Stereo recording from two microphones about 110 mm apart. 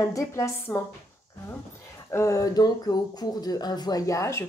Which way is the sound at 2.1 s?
25° left (ahead or behind).